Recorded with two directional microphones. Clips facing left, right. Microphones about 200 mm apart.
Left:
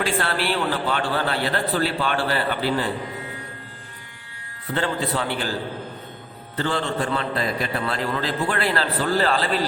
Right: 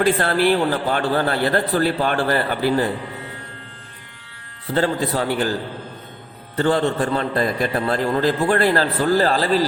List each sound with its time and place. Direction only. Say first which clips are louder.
0.0 s a man's voice: right 7 dB; 45° right (ahead or behind)
4.7 s a man's voice: right 4 dB; 40° right (ahead or behind)
6.6 s a man's voice: right 6 dB; 45° right (ahead or behind)